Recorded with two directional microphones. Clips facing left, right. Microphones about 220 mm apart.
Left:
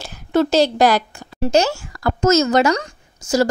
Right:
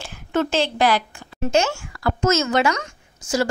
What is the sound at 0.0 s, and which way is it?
A woman's voice, 35° left (ahead or behind).